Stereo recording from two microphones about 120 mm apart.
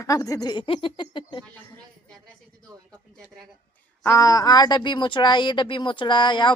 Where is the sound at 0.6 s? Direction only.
50° left (ahead or behind).